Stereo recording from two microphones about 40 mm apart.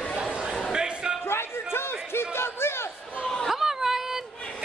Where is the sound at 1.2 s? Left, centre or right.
Left.